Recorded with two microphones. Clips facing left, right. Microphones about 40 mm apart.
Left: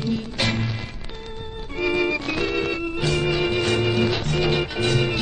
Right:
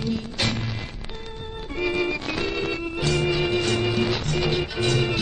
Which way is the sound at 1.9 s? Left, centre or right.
Centre.